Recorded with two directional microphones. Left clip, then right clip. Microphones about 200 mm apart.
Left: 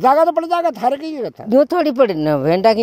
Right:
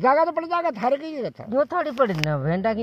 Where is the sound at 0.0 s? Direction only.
45° left (ahead or behind).